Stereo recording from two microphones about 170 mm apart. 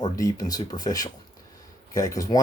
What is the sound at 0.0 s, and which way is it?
Speech, 20° left (ahead or behind).